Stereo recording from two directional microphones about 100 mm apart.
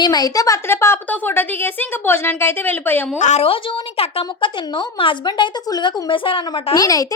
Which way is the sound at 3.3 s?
65° left (ahead or behind).